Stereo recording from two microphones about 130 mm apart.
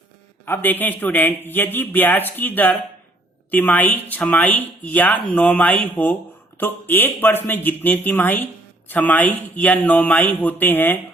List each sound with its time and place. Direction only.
0.4 s speech: 15° left (ahead or behind)